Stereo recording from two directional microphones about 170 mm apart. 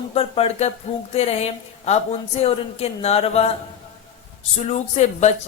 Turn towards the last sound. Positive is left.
turn(degrees=40)  # may be behind; listen again after turning